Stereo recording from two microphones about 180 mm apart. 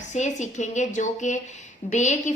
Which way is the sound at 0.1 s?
40° left (ahead or behind).